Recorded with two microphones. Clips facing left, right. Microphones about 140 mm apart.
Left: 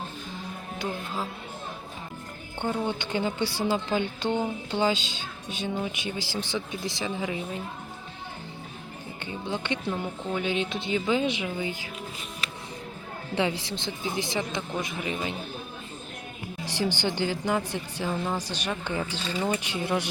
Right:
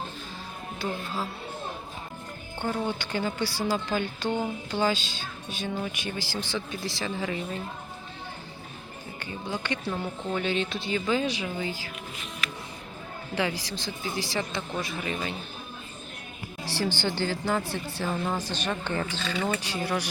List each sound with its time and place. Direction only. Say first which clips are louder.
0.8 s speech: even; 15° left (ahead or behind)
2.6 s speech: left 1 dB; 20° left (ahead or behind)
9.2 s speech: left 1 dB; 25° left (ahead or behind)
13.3 s speech: left 2 dB; 25° left (ahead or behind)
16.6 s speech: left 1 dB; 20° left (ahead or behind)